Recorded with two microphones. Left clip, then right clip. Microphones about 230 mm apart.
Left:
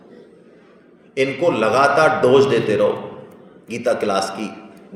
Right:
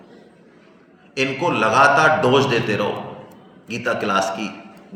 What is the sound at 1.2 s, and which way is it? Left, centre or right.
A man's voice, centre.